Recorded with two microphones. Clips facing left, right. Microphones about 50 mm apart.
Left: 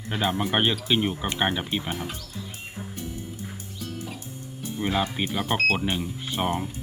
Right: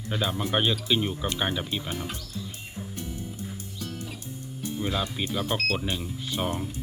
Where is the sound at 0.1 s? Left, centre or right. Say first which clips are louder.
Left 2 dB; left.